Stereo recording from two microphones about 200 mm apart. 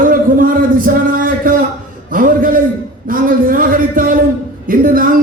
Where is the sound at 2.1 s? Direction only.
45° right (ahead or behind).